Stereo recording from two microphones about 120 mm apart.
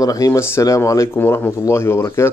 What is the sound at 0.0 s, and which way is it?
Speech, 30° left (ahead or behind).